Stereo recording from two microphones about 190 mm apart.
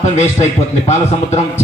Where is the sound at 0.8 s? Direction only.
35° left (ahead or behind).